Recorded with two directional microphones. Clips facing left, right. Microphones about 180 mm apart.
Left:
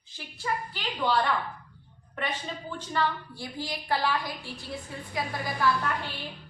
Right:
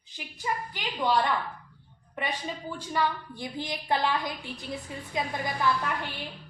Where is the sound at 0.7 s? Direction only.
15° right (ahead or behind).